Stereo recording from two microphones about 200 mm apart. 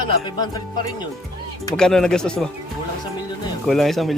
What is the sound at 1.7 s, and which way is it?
Speech, 5° left (ahead or behind).